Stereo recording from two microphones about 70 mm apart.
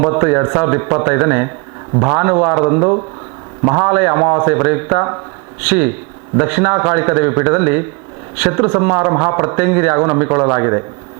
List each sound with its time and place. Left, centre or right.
0.0 s a man's voice: right